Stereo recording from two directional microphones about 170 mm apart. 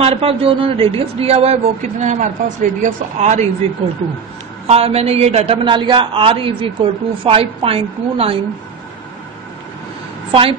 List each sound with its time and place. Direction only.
0.0 s a man's voice: 35° right (ahead or behind)
4.6 s a man's voice: 35° right (ahead or behind)